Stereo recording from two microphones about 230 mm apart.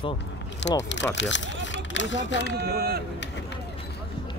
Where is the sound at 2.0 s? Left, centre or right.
Left.